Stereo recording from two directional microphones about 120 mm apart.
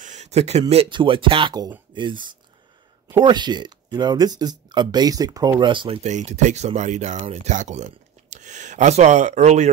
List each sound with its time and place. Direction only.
0.0 s speech: 80° right; by 0.8 s 60° right (ahead or behind)
0.8 s speech: 45° right (ahead or behind)
6.0 s speech: 75° right (ahead or behind)